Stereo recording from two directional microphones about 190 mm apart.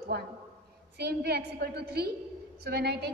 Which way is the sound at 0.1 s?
60° right (ahead or behind).